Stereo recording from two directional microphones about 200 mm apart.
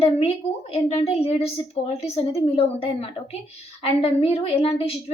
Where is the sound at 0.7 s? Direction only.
30° left (ahead or behind).